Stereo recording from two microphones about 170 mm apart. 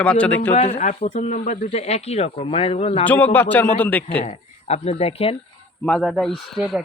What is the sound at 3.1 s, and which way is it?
A man's voice, 10° left (ahead or behind).